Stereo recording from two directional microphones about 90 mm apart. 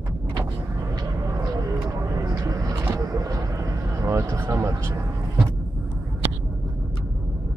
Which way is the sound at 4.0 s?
35° right (ahead or behind).